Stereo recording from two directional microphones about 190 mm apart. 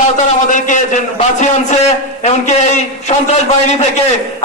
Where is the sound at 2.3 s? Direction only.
35° left (ahead or behind).